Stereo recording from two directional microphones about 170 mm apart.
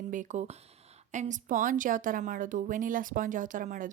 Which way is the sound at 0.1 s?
45° right (ahead or behind).